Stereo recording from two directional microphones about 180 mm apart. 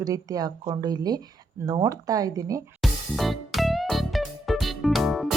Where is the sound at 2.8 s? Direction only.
Centre (ahead or behind).